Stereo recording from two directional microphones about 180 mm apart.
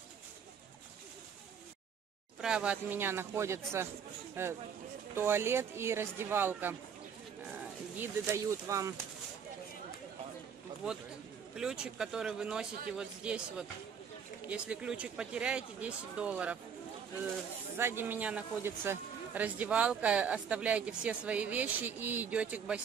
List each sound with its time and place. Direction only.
2.4 s speech: 5° right (ahead or behind)
8.0 s speech: 15° right (ahead or behind)
11.5 s a man's voice: 5° right (ahead or behind)
17.7 s speech: 10° right (ahead or behind)